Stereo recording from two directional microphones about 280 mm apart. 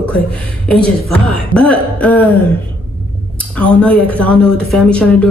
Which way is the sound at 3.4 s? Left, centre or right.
Centre.